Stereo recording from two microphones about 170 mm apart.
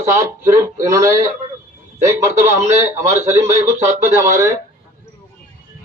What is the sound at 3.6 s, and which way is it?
Speech, 15° right (ahead or behind).